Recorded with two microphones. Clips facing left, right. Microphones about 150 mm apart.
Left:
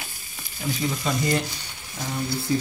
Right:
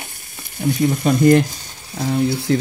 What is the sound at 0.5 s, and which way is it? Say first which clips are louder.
Speech: right 9 dB; 65° right (ahead or behind).